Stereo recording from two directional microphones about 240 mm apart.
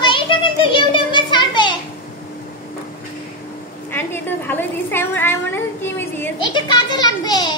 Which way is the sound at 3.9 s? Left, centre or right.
Centre.